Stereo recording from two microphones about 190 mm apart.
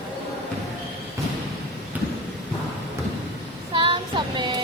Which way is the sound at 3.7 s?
25° right (ahead or behind).